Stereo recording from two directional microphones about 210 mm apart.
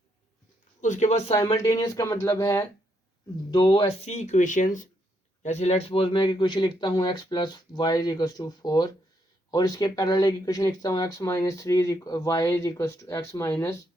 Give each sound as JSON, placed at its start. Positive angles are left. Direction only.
{"t": 0.8, "sound": "speech", "side_deg": 35}
{"t": 1.3, "sound": "speech", "side_deg": 15}